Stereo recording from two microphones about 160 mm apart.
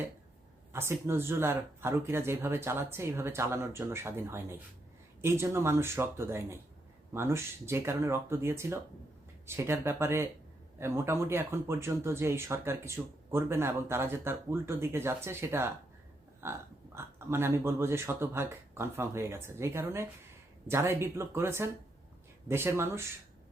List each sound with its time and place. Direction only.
0.7 s speech: 15° right (ahead or behind)